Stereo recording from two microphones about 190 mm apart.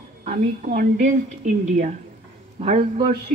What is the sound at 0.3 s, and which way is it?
A woman's voice, 50° right (ahead or behind).